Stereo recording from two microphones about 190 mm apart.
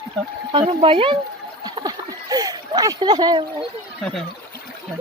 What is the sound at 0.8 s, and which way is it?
Speech, 30° right (ahead or behind).